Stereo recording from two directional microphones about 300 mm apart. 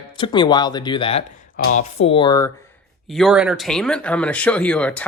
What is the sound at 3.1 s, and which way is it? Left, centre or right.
Speech, centre.